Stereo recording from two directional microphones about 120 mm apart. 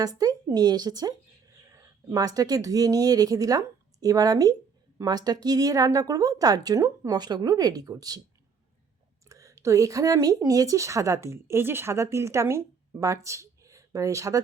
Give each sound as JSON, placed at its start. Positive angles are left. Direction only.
{"t": 0.0, "sound": "a woman's voice", "side_deg": -30}
{"t": 9.3, "sound": "speech", "side_deg": -25}